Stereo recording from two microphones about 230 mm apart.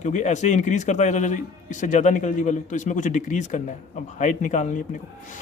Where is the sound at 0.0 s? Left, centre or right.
Left.